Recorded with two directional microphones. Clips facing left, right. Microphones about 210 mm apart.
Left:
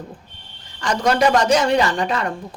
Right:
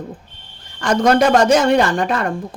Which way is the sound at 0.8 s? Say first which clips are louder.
Right 4 dB; 50° right (ahead or behind).